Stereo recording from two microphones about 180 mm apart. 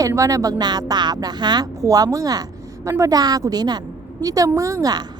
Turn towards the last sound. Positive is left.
turn(degrees=-20)  # may be behind; listen again after turning